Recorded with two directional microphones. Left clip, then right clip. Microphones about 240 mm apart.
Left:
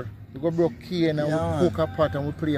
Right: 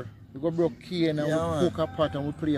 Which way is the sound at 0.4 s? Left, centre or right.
Centre.